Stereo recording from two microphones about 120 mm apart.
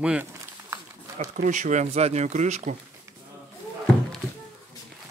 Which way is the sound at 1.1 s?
85° right.